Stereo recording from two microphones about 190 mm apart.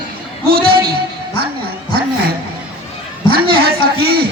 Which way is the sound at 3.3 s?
55° right (ahead or behind).